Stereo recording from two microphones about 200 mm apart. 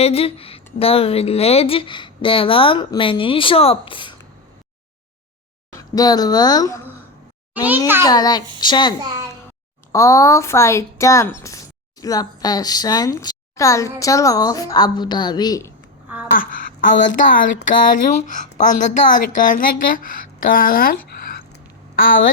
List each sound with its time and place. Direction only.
0.0 s speech: 30° left (ahead or behind)
5.7 s speech: 20° left (ahead or behind)
8.0 s speech: 20° left (ahead or behind)
16.4 s speech: 40° left (ahead or behind)